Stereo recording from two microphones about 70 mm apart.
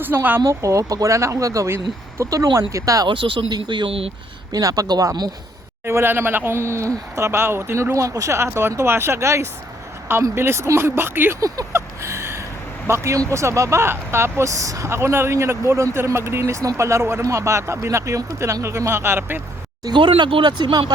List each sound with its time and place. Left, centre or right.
0.0 s speech: right
0.4 s speech: right
3.7 s speech: right
4.5 s speech: right
5.8 s speech: right
11.3 s a sound: right
12.9 s speech: right
20.4 s speech: right